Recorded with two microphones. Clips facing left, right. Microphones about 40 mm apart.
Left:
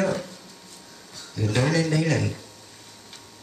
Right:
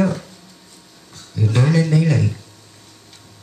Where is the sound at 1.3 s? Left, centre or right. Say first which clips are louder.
Right 5 dB; centre.